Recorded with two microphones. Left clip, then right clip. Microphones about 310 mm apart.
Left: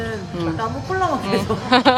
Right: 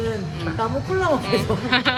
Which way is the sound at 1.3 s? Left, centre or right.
Centre.